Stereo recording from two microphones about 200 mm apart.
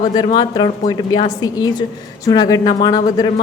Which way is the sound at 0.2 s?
20° left (ahead or behind).